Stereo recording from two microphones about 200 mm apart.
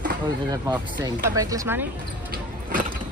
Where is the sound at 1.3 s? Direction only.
15° right (ahead or behind).